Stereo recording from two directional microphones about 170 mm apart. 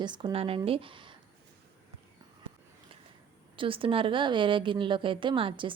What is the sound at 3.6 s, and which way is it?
A woman's voice, 30° right (ahead or behind).